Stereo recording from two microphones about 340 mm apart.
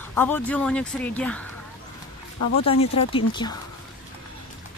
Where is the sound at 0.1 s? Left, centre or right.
Centre.